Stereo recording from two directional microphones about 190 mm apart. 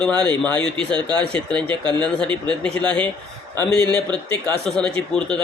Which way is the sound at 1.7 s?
25° right (ahead or behind).